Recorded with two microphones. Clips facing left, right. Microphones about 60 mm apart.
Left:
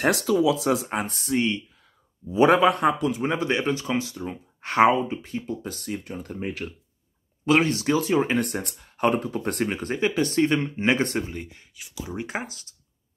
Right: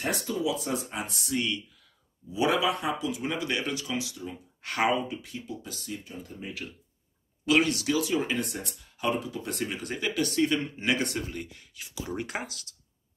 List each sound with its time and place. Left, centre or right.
0.0 s speech: left
0.9 s speech: left
3.2 s speech: left
11.7 s speech: centre
12.2 s speech: left